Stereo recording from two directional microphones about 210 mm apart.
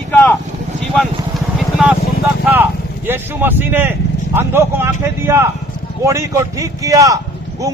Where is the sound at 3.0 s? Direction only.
10° right (ahead or behind).